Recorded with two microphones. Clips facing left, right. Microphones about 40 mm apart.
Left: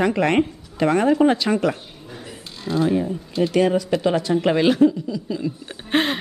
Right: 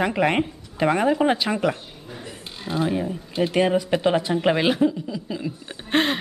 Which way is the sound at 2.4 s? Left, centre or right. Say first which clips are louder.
Left 4 dB; centre.